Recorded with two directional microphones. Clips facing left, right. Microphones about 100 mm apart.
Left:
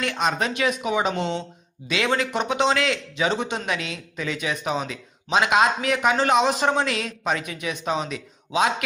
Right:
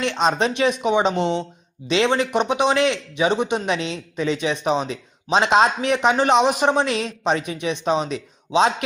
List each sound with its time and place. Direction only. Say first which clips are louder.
0.0 s speech: right 4 dB; 25° right (ahead or behind)